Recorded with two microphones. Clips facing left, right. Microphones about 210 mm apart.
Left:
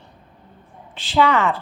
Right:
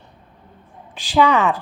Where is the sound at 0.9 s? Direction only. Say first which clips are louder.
Right 2 dB; 15° right (ahead or behind).